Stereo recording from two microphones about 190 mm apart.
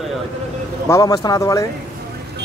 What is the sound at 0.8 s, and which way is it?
Speech, 15° left (ahead or behind).